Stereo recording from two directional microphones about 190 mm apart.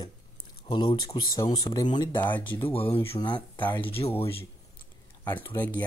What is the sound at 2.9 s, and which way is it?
Speech, 30° left (ahead or behind).